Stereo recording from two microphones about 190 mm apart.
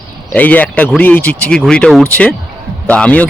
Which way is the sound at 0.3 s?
10° left (ahead or behind).